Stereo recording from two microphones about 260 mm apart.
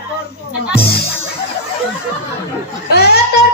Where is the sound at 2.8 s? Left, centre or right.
Left.